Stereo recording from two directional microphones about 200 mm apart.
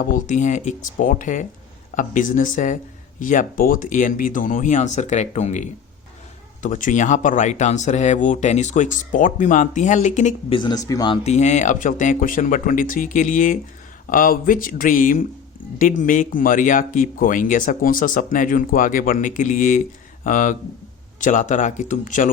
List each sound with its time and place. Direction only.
0.0 s speech: 40° left (ahead or behind)
10.6 s speech: 20° left (ahead or behind); by 22.3 s 40° left (ahead or behind)